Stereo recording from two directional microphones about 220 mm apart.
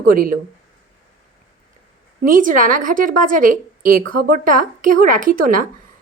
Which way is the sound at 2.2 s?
40° right (ahead or behind).